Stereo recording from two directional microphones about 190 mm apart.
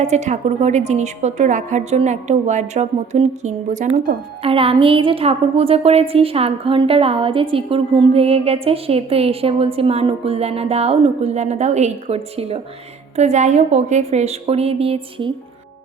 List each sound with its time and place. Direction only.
0.0 s a woman's voice: 35° right (ahead or behind)